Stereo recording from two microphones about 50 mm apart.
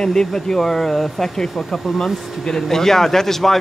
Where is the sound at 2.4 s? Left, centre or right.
Centre.